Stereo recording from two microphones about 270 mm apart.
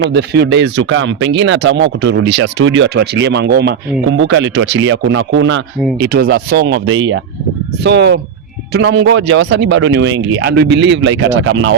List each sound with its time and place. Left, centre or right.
0.1 s speech: right